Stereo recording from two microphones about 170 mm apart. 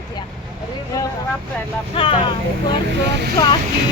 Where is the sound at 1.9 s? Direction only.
30° left (ahead or behind).